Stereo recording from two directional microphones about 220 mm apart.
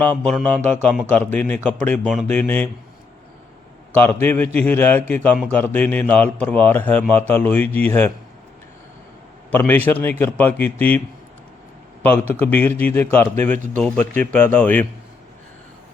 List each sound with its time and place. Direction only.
0.0 s a man's voice: 5° left (ahead or behind)
4.0 s a man's voice: 10° left (ahead or behind)
9.5 s a man's voice: 10° left (ahead or behind)
12.3 s a man's voice: 5° left (ahead or behind)